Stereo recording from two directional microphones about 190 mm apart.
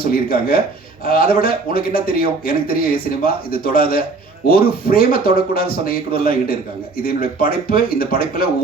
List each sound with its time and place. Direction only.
0.0 s a man's voice: 50° left (ahead or behind)